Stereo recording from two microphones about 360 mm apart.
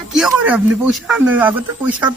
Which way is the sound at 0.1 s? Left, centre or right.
Centre.